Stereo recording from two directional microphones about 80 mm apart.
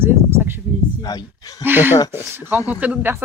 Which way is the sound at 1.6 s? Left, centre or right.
Right.